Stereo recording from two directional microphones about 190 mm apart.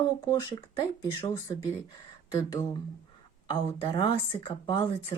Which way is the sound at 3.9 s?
25° left (ahead or behind).